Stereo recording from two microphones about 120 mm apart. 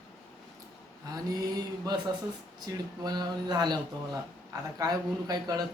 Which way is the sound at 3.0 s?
35° right (ahead or behind).